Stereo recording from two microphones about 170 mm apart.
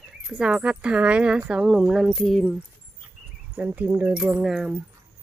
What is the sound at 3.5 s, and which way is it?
Speech, 10° right (ahead or behind).